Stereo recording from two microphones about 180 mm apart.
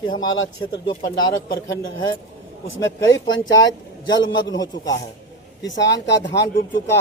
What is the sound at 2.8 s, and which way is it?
Speech, 90° left.